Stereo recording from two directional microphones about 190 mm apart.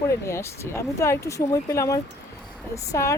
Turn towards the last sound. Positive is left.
turn(degrees=15)  # may be behind; listen again after turning